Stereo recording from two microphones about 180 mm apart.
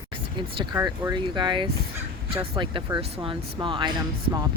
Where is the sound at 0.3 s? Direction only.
25° right (ahead or behind).